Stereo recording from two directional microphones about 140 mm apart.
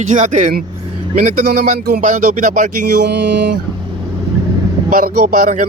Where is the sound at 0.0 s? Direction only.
60° right (ahead or behind); by 2.6 s 75° right (ahead or behind).